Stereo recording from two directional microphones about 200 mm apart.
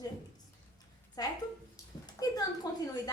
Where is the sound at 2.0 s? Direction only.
20° left (ahead or behind).